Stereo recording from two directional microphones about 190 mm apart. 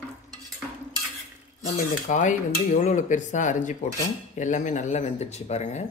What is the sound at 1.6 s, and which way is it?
Cutlery, 40° left (ahead or behind).